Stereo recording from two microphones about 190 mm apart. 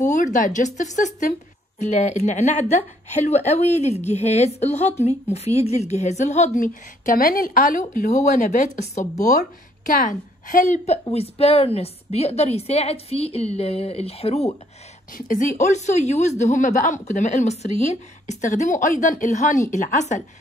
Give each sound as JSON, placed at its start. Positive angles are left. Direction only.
{"t": 0.0, "sound": "a woman's voice", "side_deg": 40}
{"t": 15.1, "sound": "a woman's voice", "side_deg": 45}